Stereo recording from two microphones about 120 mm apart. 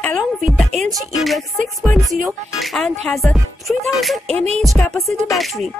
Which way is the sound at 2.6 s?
5° left (ahead or behind).